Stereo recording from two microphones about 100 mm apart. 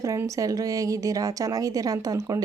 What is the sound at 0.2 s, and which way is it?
Speech, 35° right (ahead or behind).